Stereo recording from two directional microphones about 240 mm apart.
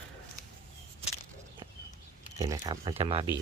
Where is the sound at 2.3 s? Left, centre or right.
Centre.